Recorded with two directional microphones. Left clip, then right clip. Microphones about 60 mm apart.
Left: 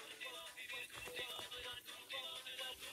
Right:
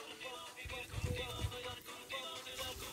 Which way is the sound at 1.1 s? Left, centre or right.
Right.